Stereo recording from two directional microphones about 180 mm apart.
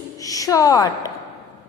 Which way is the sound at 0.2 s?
20° left (ahead or behind).